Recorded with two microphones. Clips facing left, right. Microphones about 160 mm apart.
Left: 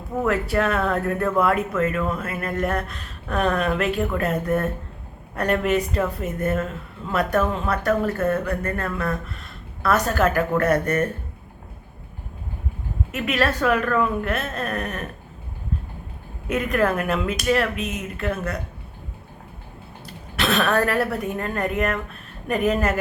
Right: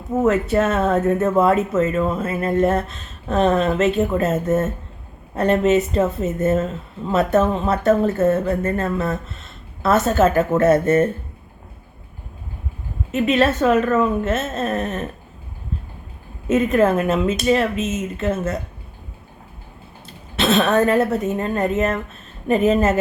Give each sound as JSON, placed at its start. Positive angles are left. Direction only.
{"t": 0.1, "sound": "speech", "side_deg": -20}
{"t": 13.1, "sound": "speech", "side_deg": -25}
{"t": 16.5, "sound": "speech", "side_deg": -25}
{"t": 20.1, "sound": "speech", "side_deg": -25}